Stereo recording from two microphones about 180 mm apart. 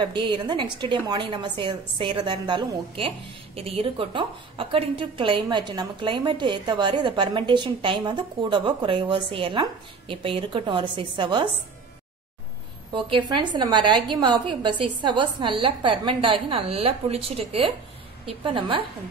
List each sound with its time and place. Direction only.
0.0 s a woman's voice: 25° right (ahead or behind)
12.9 s a woman's voice: 25° right (ahead or behind)